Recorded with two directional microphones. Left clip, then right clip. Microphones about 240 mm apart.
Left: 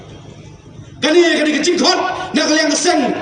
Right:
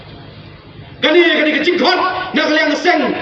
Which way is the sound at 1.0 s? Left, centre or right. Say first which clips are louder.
Right 1 dB; left.